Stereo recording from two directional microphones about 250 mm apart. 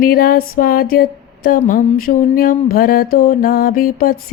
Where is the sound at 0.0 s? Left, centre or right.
Left.